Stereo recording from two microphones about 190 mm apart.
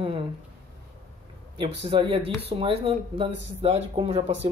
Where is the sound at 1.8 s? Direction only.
30° right (ahead or behind).